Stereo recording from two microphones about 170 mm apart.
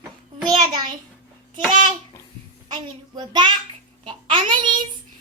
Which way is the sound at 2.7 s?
25° right (ahead or behind).